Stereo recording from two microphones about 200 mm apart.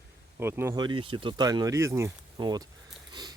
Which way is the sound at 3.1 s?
20° right (ahead or behind).